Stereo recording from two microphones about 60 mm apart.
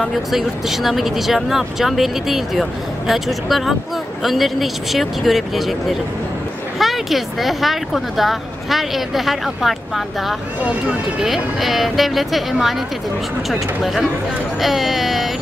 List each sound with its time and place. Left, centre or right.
0.3 s speech: centre
10.6 s speech: right
11.2 s speech: centre
14.6 s speech: centre